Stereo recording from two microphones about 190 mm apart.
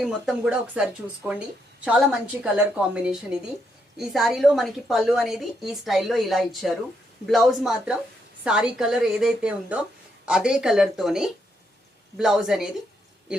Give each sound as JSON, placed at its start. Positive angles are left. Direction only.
{"t": 0.0, "sound": "a woman's voice", "side_deg": 0}